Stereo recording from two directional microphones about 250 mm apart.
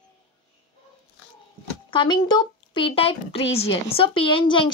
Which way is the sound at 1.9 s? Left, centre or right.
Centre.